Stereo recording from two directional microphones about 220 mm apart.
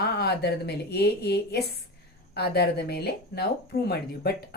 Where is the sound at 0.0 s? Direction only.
50° left (ahead or behind).